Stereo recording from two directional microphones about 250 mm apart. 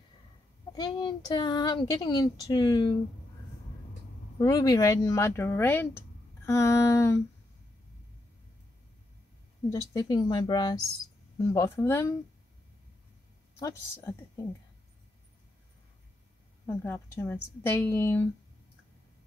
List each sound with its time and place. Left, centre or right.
0.7 s speech: centre
4.4 s speech: centre
9.7 s speech: centre
13.6 s speech: centre
16.6 s speech: centre